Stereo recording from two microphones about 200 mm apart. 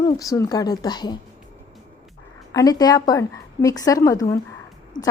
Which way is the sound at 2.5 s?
20° left (ahead or behind).